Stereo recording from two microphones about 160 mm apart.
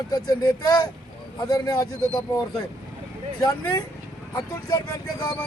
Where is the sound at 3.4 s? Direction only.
25° left (ahead or behind).